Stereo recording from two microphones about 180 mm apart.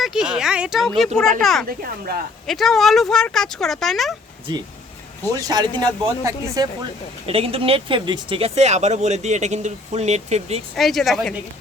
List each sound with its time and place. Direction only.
0.0 s speech: 5° right (ahead or behind)
1.6 s speech: 55° right (ahead or behind)
2.5 s speech: centre (ahead or behind)
5.3 s speech: 20° right (ahead or behind)
7.3 s speech: 30° right (ahead or behind)
10.8 s speech: centre (ahead or behind)